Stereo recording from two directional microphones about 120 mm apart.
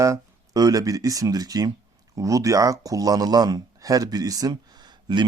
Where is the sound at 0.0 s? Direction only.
30° right (ahead or behind).